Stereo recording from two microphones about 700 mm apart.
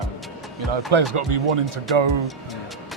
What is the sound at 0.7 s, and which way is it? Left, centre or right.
Speech, right.